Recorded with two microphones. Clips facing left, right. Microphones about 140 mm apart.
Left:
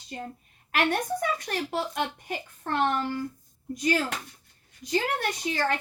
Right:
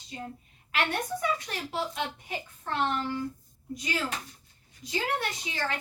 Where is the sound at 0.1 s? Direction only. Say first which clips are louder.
Left 2 dB; 55° left (ahead or behind).